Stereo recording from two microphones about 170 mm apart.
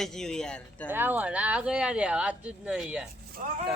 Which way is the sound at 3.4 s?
50° right (ahead or behind).